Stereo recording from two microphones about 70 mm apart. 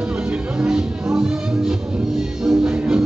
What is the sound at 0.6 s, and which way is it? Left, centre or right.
Music, centre.